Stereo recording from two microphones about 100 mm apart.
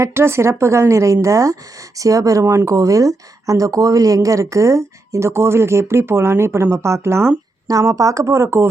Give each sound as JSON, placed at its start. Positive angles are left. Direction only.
{"t": 0.0, "sound": "speech", "side_deg": -25}